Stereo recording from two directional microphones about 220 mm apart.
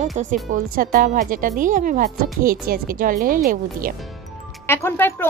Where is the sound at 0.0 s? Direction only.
35° right (ahead or behind).